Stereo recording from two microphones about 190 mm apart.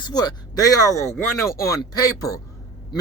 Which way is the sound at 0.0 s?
20° left (ahead or behind).